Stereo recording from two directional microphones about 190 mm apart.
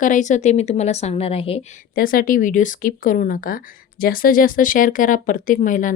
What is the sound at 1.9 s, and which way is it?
Speech, 50° left (ahead or behind).